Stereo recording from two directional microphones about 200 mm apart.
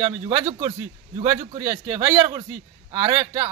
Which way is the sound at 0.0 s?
15° right (ahead or behind).